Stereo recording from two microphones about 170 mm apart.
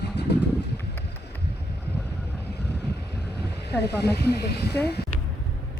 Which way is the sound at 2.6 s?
80° left.